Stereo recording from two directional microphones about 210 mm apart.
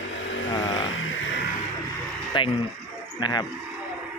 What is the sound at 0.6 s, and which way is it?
Vehicle, 60° left (ahead or behind).